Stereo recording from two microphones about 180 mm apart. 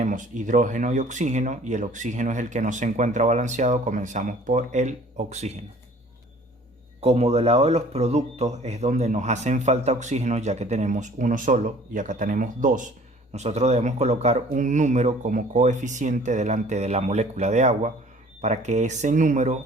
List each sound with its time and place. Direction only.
0.0 s speech: 45° right (ahead or behind)
7.0 s speech: 35° right (ahead or behind)